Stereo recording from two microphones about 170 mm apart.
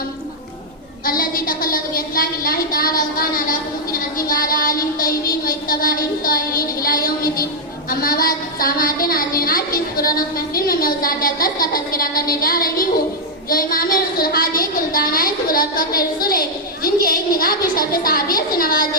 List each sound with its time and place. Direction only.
1.0 s a woman's voice: 55° left (ahead or behind)